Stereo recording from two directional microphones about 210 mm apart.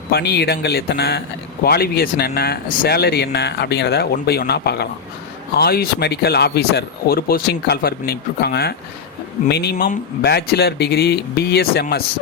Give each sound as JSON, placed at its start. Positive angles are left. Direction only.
{"t": 0.1, "sound": "speech", "side_deg": 50}